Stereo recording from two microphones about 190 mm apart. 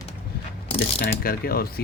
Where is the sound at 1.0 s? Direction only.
50° left (ahead or behind).